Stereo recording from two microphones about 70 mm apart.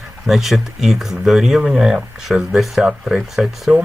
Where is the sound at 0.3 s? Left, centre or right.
Centre.